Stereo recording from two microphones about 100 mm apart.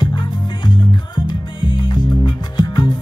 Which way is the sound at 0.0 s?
50° left (ahead or behind).